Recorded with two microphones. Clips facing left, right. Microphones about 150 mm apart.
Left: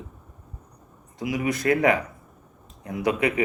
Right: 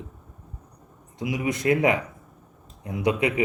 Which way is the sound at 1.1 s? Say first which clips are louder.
Left 1 dB; 20° right (ahead or behind).